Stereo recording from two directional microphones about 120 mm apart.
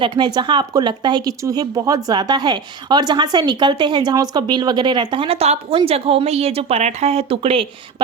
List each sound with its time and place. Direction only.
0.0 s speech: 35° right (ahead or behind)